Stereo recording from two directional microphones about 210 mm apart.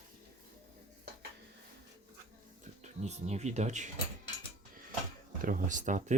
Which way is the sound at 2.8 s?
30° right (ahead or behind).